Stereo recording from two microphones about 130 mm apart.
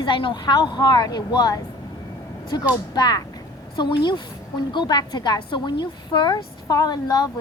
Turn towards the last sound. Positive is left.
turn(degrees=30)  # may be behind; listen again after turning